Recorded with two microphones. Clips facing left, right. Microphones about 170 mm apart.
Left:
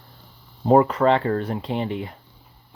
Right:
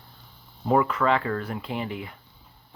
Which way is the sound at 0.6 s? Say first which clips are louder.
Left 6 dB; 35° left (ahead or behind).